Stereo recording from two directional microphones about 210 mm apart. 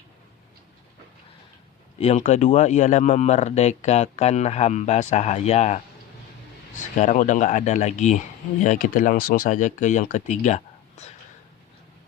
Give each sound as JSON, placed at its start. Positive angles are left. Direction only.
{"t": 2.0, "sound": "speech", "side_deg": 30}